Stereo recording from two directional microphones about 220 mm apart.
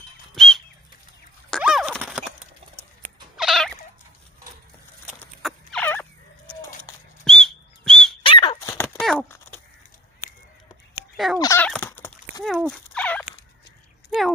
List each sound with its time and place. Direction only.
0.3 s a sound: centre (ahead or behind)
1.5 s clip-clop: centre (ahead or behind)
3.3 s cat: centre (ahead or behind)
5.0 s fowl: centre (ahead or behind)
7.2 s dog: centre (ahead or behind)
8.2 s dog: 20° left (ahead or behind)
8.8 s a sound: 5° left (ahead or behind)
11.3 s fowl: 15° left (ahead or behind)
12.4 s fowl: centre (ahead or behind)